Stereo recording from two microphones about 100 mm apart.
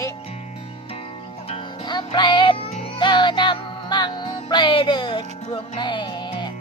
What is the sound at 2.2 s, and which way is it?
Music, 50° left (ahead or behind).